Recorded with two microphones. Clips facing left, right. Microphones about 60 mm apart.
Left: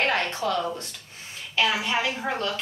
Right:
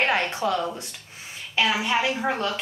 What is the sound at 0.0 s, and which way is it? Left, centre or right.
A woman's voice, centre.